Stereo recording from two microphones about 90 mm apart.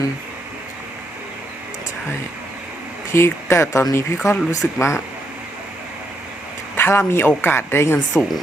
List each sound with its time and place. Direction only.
3.1 s speech: 30° left (ahead or behind)
6.7 s a sound: 30° left (ahead or behind)
7.3 s speech: 25° left (ahead or behind)